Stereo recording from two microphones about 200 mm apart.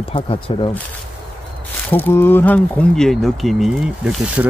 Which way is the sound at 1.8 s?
10° left (ahead or behind).